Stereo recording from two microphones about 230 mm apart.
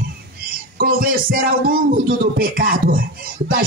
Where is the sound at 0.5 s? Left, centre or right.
Right.